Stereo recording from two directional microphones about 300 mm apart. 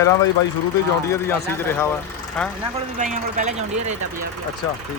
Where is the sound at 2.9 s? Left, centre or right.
Right.